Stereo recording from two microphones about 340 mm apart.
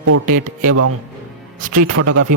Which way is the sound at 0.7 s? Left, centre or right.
Right.